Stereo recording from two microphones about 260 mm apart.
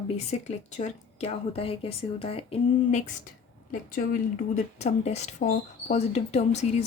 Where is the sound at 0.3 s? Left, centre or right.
Left.